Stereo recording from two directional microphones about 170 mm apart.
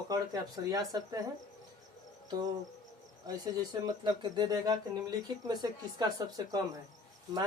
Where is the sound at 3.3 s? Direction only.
25° right (ahead or behind).